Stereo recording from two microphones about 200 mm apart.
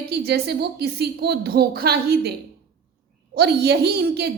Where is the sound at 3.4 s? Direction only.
55° right (ahead or behind).